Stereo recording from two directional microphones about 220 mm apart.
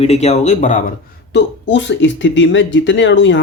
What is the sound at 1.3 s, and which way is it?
Speech, 55° left (ahead or behind).